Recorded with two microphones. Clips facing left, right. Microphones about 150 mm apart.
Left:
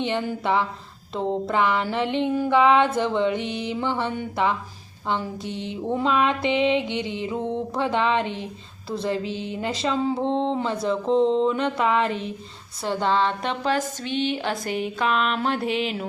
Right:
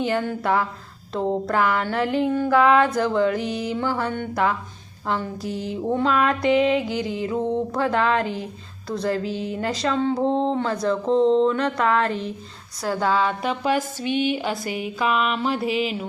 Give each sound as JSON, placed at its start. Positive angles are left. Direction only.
{"t": 0.0, "sound": "music", "side_deg": 0}
{"t": 12.8, "sound": "a woman's voice", "side_deg": -5}
{"t": 14.7, "sound": "music", "side_deg": -5}